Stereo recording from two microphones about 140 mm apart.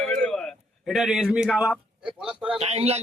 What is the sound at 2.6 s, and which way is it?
Speech, 45° right (ahead or behind).